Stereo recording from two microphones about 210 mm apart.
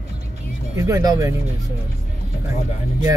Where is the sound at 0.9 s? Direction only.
15° right (ahead or behind).